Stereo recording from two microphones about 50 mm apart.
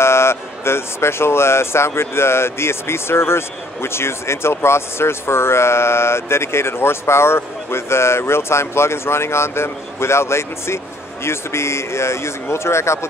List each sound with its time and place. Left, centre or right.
0.0 s speech: left